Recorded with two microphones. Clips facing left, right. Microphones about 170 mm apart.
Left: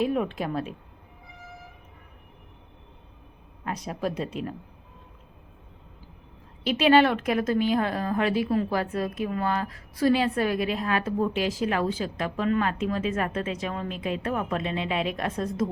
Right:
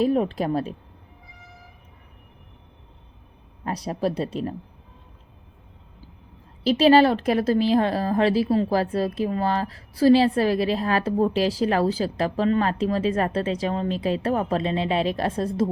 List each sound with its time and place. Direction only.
0.0 s a woman's voice: 35° right (ahead or behind)
3.6 s a woman's voice: 35° right (ahead or behind)
6.7 s a woman's voice: 35° right (ahead or behind)